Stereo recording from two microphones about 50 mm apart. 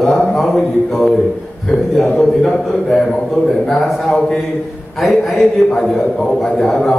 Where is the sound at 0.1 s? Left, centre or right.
Centre.